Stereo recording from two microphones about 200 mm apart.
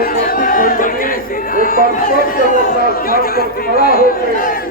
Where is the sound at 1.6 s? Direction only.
45° left (ahead or behind).